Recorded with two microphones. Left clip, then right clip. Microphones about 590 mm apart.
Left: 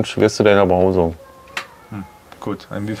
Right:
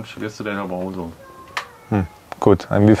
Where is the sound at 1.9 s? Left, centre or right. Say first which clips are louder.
Right 11 dB; right.